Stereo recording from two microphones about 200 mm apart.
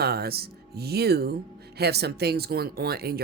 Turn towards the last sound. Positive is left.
turn(degrees=-50)  # may be behind; listen again after turning